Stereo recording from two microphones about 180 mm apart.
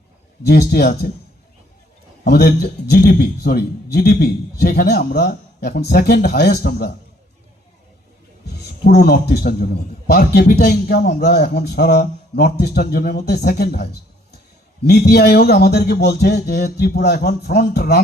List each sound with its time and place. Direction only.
0.4 s speech: 65° left (ahead or behind)
2.2 s speech: 65° left (ahead or behind)
8.8 s speech: 65° left (ahead or behind)